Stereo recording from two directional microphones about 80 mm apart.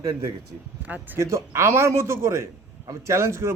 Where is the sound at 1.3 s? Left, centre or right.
Right.